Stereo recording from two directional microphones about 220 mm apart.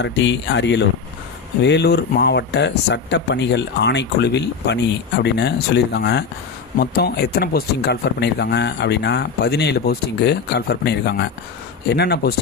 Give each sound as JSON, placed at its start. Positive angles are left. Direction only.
{"t": 0.0, "sound": "speech", "side_deg": 55}